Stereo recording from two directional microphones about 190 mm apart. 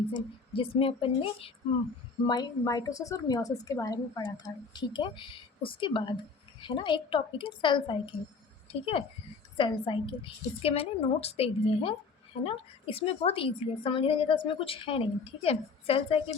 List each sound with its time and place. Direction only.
0.1 s a woman's voice: 25° left (ahead or behind)